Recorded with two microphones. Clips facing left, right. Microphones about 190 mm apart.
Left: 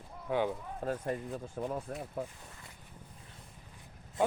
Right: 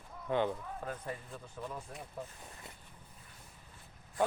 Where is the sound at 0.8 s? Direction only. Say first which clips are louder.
Left 7 dB; 40° left (ahead or behind).